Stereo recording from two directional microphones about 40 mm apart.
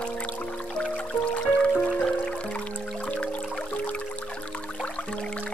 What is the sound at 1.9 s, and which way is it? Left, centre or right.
Music, centre.